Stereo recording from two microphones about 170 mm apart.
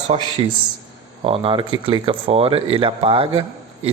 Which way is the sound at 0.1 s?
35° right (ahead or behind).